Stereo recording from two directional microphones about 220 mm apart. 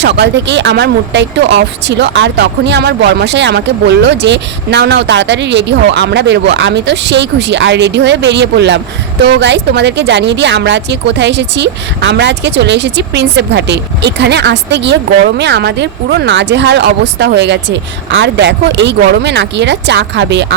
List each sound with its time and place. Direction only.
0.0 s speech: 50° right (ahead or behind)